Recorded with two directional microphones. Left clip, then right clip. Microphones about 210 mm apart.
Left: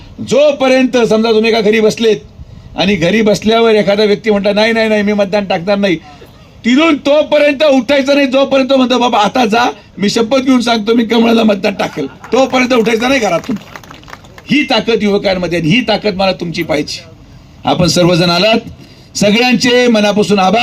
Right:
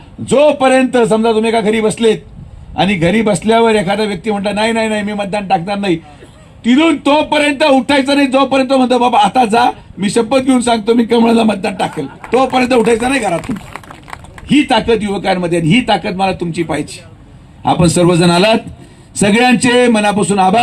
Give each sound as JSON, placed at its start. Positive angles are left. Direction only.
{"t": 0.3, "sound": "a man's voice", "side_deg": 35}
{"t": 14.4, "sound": "a man's voice", "side_deg": 30}